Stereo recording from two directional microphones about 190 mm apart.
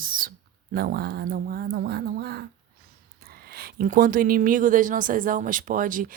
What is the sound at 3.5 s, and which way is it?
Speech, 50° right (ahead or behind).